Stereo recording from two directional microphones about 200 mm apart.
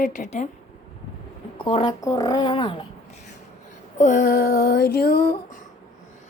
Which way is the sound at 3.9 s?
40° left (ahead or behind).